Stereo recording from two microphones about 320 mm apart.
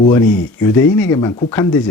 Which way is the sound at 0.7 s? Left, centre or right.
Centre.